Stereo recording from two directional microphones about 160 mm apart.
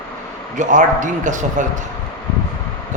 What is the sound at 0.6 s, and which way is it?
Speech, 50° right (ahead or behind).